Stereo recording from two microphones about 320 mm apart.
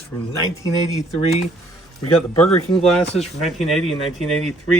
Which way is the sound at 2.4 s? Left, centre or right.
Centre.